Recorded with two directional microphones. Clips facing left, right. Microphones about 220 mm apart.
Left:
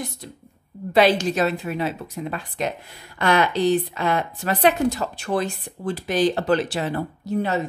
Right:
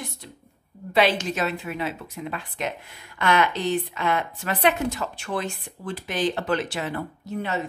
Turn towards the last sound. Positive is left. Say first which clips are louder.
# left 6 dB
turn(degrees=35)  # may be behind; listen again after turning